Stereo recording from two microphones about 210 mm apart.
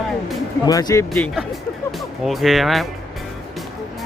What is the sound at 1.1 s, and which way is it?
Speech, centre (ahead or behind).